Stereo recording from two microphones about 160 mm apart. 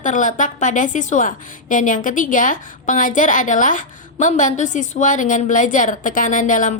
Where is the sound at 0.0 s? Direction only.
55° left (ahead or behind).